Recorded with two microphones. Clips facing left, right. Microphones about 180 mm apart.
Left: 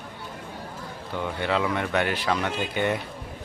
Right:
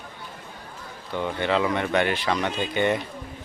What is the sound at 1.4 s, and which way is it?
A man's voice, 5° left (ahead or behind).